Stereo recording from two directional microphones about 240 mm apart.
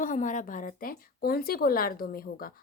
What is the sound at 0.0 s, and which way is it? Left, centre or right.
Speech, left.